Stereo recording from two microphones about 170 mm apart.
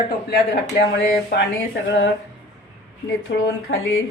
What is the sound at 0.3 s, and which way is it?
Speech, 75° left (ahead or behind).